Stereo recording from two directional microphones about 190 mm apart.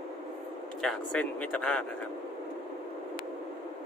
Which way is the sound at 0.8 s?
5° left (ahead or behind).